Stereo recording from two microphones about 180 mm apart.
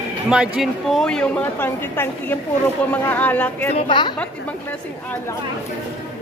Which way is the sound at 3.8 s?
25° left (ahead or behind).